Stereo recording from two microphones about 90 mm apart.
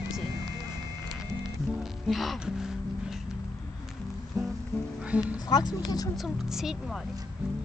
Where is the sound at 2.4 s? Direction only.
5° right (ahead or behind).